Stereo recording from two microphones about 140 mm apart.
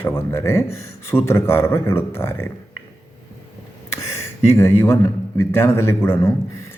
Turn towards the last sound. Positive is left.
turn(degrees=20)  # may be behind; listen again after turning